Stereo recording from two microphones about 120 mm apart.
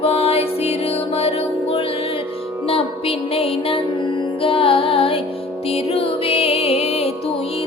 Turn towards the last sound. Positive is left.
turn(degrees=60)  # may be behind; listen again after turning